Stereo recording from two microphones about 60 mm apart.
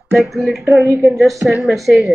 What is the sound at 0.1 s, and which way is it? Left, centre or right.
Speech, centre.